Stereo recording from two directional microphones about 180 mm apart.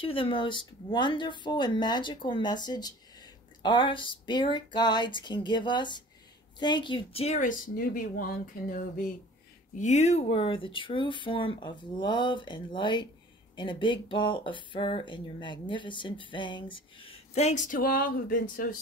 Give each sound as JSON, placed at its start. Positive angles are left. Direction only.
{"t": 0.0, "sound": "speech", "side_deg": 30}
{"t": 9.8, "sound": "speech", "side_deg": 40}